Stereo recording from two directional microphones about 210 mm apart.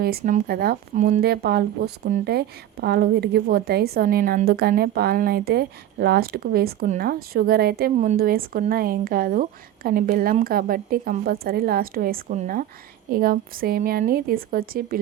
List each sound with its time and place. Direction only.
0.0 s a woman's voice: 45° right (ahead or behind)